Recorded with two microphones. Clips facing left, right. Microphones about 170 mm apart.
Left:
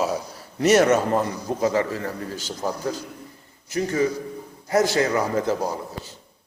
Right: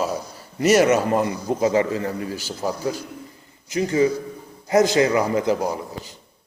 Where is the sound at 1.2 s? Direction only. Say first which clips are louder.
Right 2 dB; 20° right (ahead or behind).